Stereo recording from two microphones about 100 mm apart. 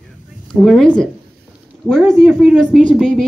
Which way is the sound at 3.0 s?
5° left (ahead or behind).